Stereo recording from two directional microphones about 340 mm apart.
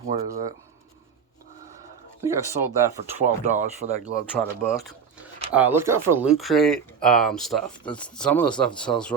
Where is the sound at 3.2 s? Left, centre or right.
Right.